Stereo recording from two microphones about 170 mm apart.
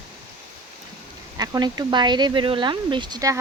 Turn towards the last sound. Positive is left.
turn(degrees=-20)  # may be behind; listen again after turning